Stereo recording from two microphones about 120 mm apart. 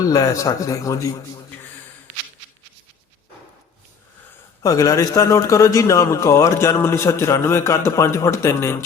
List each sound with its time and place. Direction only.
0.0 s a man's voice: 30° left (ahead or behind)
4.6 s a man's voice: 30° left (ahead or behind)